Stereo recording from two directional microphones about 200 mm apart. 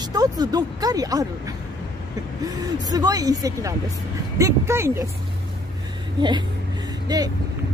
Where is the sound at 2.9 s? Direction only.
20° right (ahead or behind).